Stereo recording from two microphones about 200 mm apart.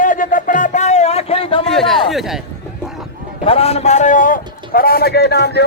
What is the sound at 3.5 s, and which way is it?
A man's voice, 30° left (ahead or behind).